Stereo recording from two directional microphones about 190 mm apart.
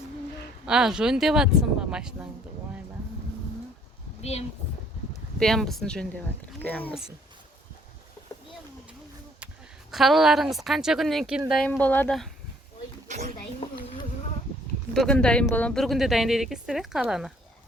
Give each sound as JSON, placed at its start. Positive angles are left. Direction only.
{"t": 0.6, "sound": "speech", "side_deg": -5}
{"t": 4.2, "sound": "speech", "side_deg": 35}
{"t": 5.4, "sound": "speech", "side_deg": 0}
{"t": 9.9, "sound": "speech", "side_deg": 0}
{"t": 13.1, "sound": "speech", "side_deg": -40}
{"t": 14.9, "sound": "speech", "side_deg": 5}